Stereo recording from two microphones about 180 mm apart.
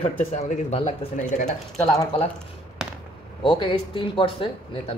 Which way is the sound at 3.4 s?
25° left (ahead or behind).